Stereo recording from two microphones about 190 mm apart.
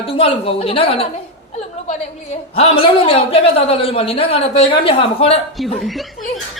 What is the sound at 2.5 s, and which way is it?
A man's voice, 30° left (ahead or behind).